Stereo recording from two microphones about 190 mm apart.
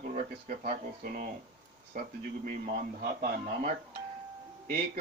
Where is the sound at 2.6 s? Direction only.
50° right (ahead or behind).